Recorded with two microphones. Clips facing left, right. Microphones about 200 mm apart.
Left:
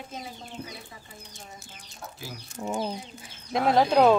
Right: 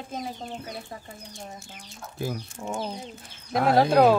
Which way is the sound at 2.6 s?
10° left (ahead or behind).